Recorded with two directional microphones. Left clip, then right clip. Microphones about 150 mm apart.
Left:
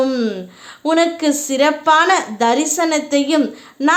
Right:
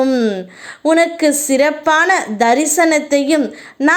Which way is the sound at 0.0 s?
15° right (ahead or behind).